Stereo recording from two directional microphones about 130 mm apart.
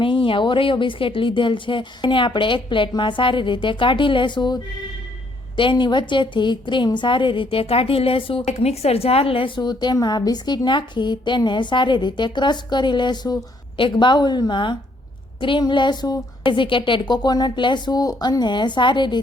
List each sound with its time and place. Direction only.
0.0 s a woman's voice: 40° left (ahead or behind)